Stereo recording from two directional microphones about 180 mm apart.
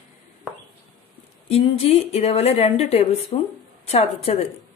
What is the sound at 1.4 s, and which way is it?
A woman's voice, 35° left (ahead or behind).